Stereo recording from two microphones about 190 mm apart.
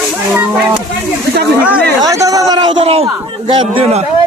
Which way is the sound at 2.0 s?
15° right (ahead or behind).